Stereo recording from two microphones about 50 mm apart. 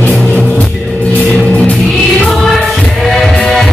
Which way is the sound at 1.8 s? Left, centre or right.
Centre.